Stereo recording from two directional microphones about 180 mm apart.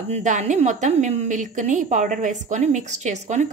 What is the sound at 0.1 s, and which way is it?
A woman's voice, 40° right (ahead or behind).